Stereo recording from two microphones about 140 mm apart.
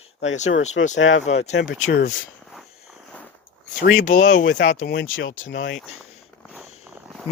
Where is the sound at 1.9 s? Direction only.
70° left (ahead or behind).